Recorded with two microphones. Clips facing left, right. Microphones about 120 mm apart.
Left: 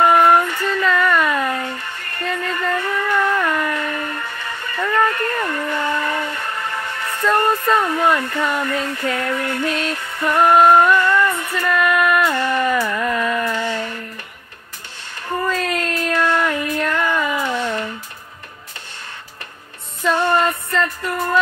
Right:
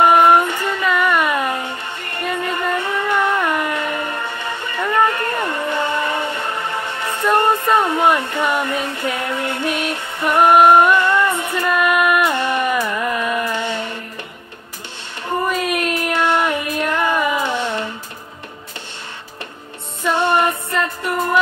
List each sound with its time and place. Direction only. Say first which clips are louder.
0.0 s child singing: right 1 dB; 20° right (ahead or behind)
15.4 s a sound: right 1 dB; 15° right (ahead or behind)
20.2 s music: right 2 dB; 25° right (ahead or behind)